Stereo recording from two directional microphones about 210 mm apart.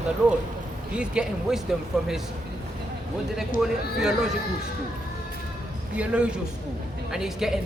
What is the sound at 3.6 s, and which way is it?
Speech, centre (ahead or behind).